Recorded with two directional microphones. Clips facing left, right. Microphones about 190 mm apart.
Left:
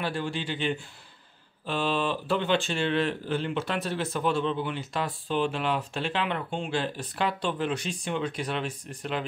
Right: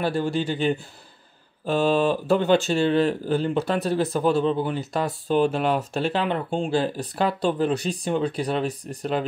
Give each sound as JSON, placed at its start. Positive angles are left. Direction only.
{"t": 0.0, "sound": "speech", "side_deg": -40}